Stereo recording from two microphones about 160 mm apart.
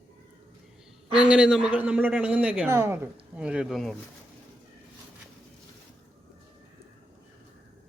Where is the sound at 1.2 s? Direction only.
5° right (ahead or behind).